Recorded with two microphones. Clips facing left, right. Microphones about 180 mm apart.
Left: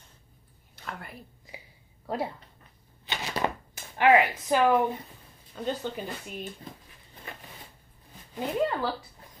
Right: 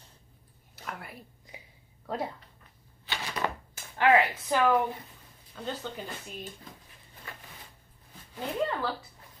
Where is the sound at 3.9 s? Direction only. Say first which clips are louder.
Left 2 dB; 15° left (ahead or behind).